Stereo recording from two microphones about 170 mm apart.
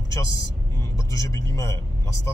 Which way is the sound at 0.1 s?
20° left (ahead or behind).